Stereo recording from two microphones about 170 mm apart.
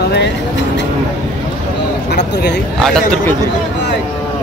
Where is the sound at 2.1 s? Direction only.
80° left.